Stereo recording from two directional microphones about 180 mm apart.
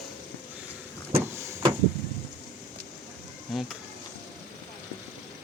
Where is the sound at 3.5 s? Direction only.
Centre (ahead or behind).